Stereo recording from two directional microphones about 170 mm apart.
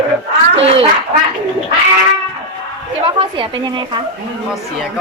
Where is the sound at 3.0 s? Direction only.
30° right (ahead or behind).